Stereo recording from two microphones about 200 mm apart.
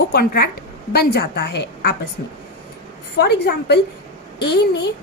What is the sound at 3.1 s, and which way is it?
Speech, 55° left (ahead or behind).